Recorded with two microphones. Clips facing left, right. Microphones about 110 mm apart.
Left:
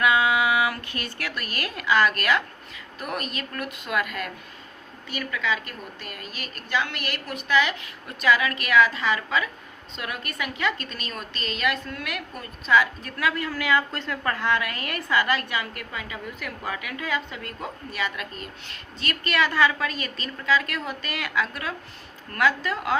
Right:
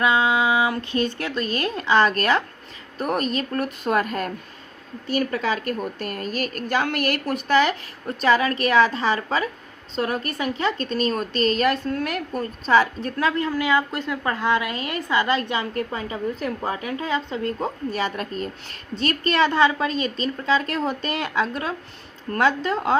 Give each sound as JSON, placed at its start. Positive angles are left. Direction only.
{"t": 0.0, "sound": "a woman's voice", "side_deg": -25}